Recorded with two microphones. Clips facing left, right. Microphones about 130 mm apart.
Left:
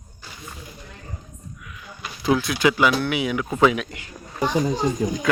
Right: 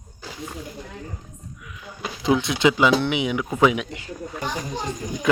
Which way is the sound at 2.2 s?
20° right (ahead or behind).